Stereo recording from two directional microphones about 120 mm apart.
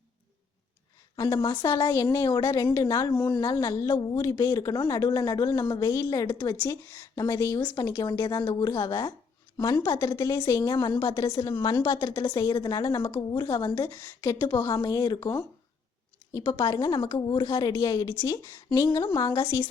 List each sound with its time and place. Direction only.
1.1 s a woman's voice: 30° left (ahead or behind)